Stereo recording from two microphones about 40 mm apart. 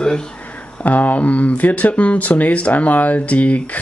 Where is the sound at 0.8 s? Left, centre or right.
Left.